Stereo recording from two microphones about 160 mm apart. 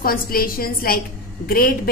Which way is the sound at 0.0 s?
65° left (ahead or behind).